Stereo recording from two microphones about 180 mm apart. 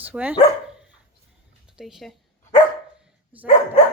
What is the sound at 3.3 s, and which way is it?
Dog, 10° right (ahead or behind).